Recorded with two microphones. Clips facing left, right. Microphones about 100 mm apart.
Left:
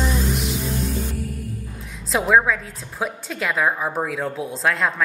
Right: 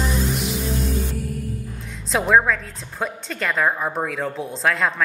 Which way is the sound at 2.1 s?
Centre (ahead or behind).